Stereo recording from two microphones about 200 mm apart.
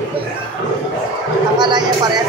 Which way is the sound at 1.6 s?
20° right (ahead or behind).